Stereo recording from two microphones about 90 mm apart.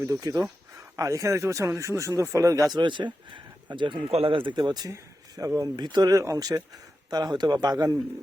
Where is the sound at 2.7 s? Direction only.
60° right (ahead or behind).